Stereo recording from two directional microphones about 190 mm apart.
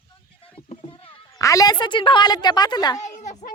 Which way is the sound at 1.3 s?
15° left (ahead or behind).